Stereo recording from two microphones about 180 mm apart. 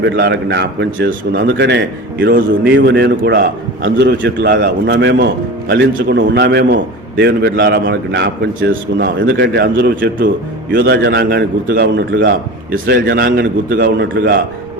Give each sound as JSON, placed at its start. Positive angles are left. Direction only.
{"t": 0.0, "sound": "a man's voice", "side_deg": -65}
{"t": 0.9, "sound": "a man's voice", "side_deg": -65}
{"t": 5.1, "sound": "a man's voice", "side_deg": -60}
{"t": 10.8, "sound": "a man's voice", "side_deg": -70}